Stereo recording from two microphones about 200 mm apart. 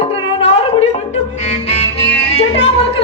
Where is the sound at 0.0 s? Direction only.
30° left (ahead or behind).